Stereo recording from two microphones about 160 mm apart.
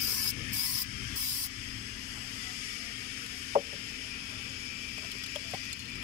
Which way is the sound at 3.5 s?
45° right (ahead or behind).